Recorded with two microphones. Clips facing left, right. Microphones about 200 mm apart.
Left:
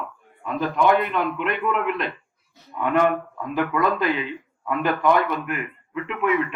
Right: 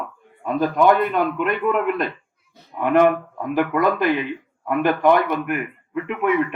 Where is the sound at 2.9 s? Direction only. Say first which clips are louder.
Right 4 dB; 60° right (ahead or behind).